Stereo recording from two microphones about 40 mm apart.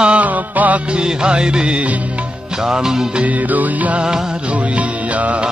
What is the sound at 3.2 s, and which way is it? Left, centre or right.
Music, right.